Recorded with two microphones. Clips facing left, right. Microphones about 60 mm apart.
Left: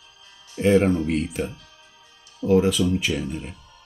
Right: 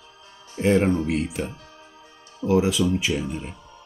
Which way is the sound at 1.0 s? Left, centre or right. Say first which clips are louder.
Left 1 dB; centre.